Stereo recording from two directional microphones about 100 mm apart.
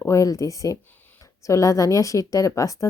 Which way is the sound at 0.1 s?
30° left (ahead or behind).